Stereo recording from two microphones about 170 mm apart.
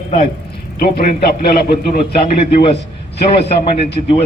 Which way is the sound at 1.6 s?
70° left (ahead or behind).